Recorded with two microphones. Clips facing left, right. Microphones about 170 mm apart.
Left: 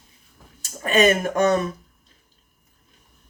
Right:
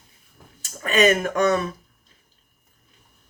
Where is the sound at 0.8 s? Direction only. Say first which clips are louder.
Left 1 dB; 40° left (ahead or behind).